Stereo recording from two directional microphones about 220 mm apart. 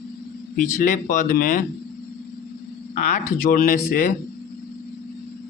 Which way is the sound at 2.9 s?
35° left (ahead or behind).